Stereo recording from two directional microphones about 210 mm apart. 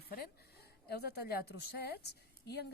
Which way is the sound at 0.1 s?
50° left (ahead or behind).